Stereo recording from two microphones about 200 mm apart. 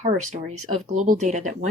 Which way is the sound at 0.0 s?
40° right (ahead or behind).